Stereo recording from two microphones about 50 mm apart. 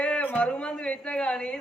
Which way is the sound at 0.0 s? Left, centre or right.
Left.